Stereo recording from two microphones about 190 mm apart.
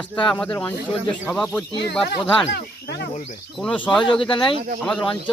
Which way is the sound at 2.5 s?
60° left (ahead or behind).